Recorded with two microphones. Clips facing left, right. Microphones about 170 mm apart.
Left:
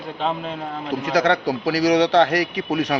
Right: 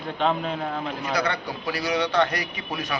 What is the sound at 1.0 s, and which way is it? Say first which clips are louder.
A man's voice: left 9 dB; 90° left.